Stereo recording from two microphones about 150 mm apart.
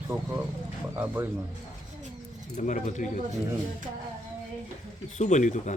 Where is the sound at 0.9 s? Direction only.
15° right (ahead or behind).